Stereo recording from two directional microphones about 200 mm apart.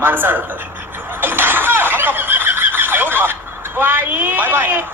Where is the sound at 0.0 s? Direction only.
10° right (ahead or behind).